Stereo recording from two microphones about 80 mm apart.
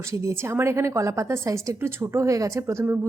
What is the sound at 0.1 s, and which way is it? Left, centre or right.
A woman's voice, right.